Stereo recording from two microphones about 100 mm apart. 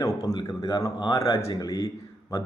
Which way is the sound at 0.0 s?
35° left (ahead or behind).